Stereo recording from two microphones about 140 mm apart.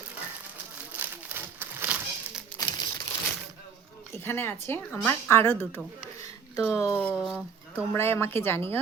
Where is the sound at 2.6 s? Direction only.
25° left (ahead or behind).